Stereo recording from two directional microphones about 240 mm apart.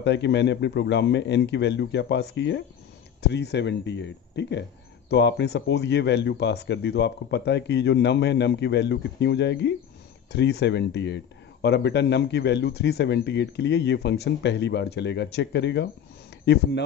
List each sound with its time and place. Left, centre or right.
0.0 s speech: left